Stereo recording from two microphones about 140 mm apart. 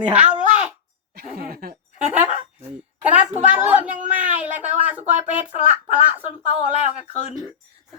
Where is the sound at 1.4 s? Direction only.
90° right.